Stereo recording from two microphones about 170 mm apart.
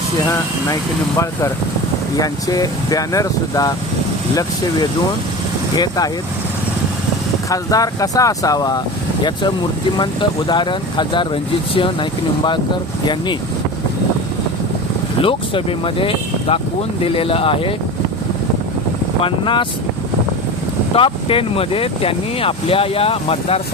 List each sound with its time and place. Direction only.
0.3 s speech: 15° left (ahead or behind)
5.7 s speech: 25° left (ahead or behind)
7.5 s speech: 20° left (ahead or behind)
10.0 s speech: 25° left (ahead or behind)
15.2 s speech: 30° left (ahead or behind)
19.2 s speech: 30° left (ahead or behind)
20.9 s speech: 30° left (ahead or behind)